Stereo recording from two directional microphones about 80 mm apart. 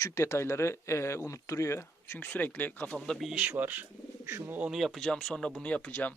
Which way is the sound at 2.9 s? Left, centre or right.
Centre.